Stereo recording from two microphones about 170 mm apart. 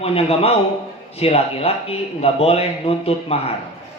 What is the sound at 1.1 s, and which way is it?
A man's voice, 35° left (ahead or behind).